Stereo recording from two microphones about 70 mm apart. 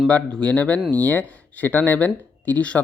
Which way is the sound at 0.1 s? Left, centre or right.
Centre.